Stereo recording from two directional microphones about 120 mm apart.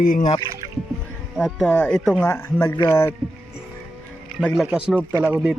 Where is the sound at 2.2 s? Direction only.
20° left (ahead or behind).